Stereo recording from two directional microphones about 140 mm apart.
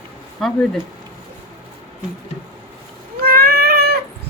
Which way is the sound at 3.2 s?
90° right.